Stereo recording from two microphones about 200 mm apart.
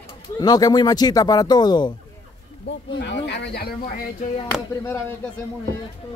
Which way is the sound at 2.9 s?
60° left (ahead or behind).